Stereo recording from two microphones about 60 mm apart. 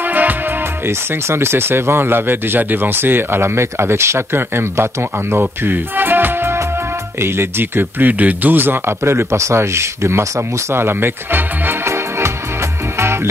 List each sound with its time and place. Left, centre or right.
0.1 s music: right
0.8 s speech: right
5.4 s music: right
7.2 s speech: right
8.1 s a man's voice: right
10.7 s music: right
13.0 s music: right